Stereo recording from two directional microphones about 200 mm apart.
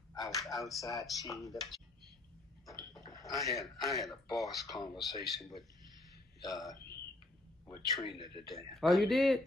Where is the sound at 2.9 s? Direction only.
20° left (ahead or behind).